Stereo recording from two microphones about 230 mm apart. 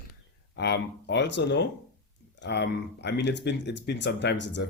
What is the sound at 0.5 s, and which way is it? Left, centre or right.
Speech, left.